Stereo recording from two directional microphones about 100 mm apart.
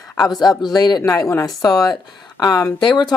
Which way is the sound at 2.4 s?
40° left (ahead or behind).